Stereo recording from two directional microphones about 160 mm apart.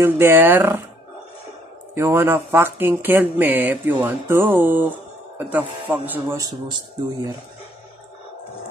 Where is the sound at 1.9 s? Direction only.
15° right (ahead or behind).